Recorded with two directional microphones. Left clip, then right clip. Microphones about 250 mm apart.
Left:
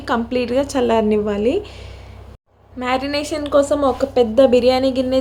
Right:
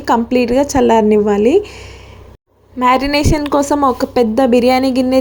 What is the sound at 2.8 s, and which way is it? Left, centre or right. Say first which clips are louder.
Speech: right 8 dB; right.